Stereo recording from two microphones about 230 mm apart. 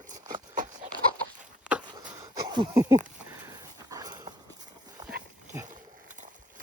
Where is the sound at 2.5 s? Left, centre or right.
Centre.